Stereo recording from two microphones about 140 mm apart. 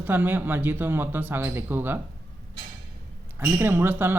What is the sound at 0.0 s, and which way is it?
Speech, 15° right (ahead or behind).